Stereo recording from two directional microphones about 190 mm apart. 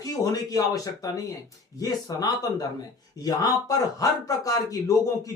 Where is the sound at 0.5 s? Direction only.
20° left (ahead or behind).